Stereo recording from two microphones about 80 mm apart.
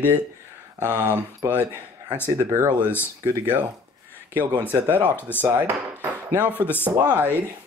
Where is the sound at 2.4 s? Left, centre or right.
Right.